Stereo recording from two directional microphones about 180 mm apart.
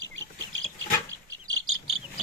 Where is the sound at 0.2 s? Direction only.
90° right.